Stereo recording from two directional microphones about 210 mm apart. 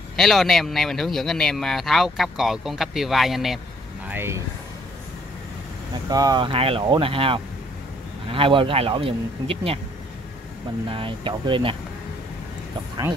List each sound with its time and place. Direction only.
0.1 s speech: centre (ahead or behind)
6.0 s speech: 20° right (ahead or behind)
10.9 s speech: 25° right (ahead or behind)